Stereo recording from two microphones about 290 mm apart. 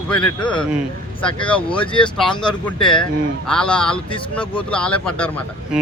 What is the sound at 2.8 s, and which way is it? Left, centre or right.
Speech, centre.